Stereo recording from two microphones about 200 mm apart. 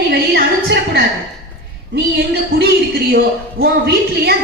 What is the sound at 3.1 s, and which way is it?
A woman's voice, 50° right (ahead or behind).